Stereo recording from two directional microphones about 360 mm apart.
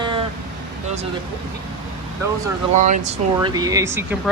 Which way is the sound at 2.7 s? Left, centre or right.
Centre.